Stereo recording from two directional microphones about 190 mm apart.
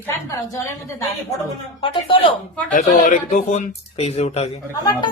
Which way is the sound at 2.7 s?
45° left (ahead or behind).